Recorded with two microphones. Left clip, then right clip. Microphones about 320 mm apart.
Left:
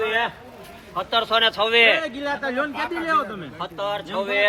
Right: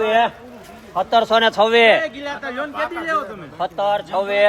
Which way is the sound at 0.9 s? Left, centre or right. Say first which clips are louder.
Right 5 dB; right.